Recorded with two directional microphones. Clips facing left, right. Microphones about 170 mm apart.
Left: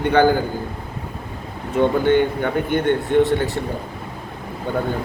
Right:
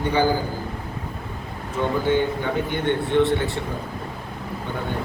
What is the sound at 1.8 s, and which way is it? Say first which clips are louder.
A man's voice: left 5 dB; 60° left (ahead or behind).